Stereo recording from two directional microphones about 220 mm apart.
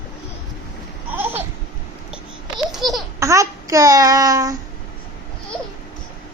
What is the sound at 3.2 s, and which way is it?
Child singing, 15° right (ahead or behind).